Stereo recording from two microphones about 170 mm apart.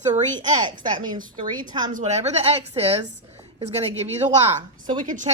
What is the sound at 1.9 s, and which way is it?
Speech, 40° right (ahead or behind).